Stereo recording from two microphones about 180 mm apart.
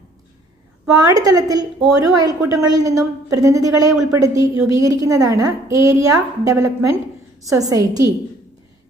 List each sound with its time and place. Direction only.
0.9 s a woman's voice: 20° right (ahead or behind)